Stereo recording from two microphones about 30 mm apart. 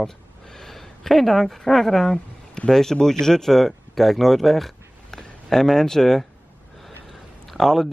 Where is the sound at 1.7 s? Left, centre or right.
Centre.